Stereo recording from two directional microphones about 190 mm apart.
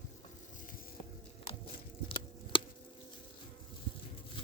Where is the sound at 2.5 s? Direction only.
25° left (ahead or behind).